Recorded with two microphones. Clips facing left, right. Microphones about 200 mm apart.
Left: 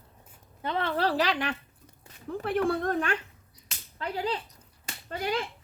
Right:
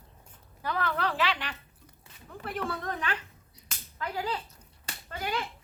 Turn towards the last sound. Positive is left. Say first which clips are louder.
# left 3 dB
turn(degrees=40)  # may be behind; listen again after turning